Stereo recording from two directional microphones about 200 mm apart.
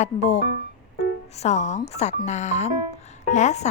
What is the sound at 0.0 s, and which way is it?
Speech, 35° left (ahead or behind).